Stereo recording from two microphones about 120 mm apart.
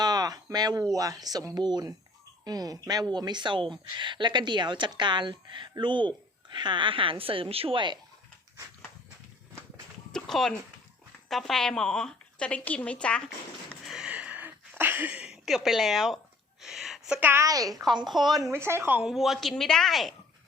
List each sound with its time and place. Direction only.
0.0 s a sound: 35° right (ahead or behind)
0.9 s speech: 30° right (ahead or behind); by 7.9 s 45° right (ahead or behind)
10.1 s a sound: 5° left (ahead or behind)
11.3 s a woman's voice: centre (ahead or behind)
13.8 s a sound: 5° right (ahead or behind)
17.2 s a woman's voice: 15° right (ahead or behind)
17.4 s speech: 30° right (ahead or behind)
18.1 s speech: centre (ahead or behind)
18.5 s speech: 20° right (ahead or behind)
19.1 s speech: centre (ahead or behind)